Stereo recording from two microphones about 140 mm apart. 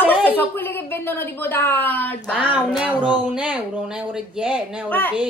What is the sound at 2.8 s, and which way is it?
Speech, 10° right (ahead or behind).